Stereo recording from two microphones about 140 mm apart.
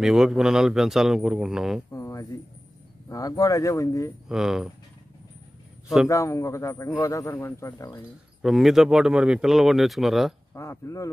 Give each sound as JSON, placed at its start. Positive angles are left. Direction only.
{"t": 0.0, "sound": "speech", "side_deg": -5}
{"t": 1.9, "sound": "a sound", "side_deg": 20}
{"t": 3.1, "sound": "speech", "side_deg": 25}
{"t": 4.3, "sound": "speech", "side_deg": -5}
{"t": 6.0, "sound": "speech", "side_deg": 20}
{"t": 8.4, "sound": "speech", "side_deg": 0}
{"t": 10.5, "sound": "speech", "side_deg": 20}